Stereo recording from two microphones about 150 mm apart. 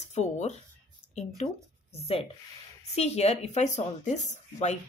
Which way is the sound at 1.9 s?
40° left (ahead or behind).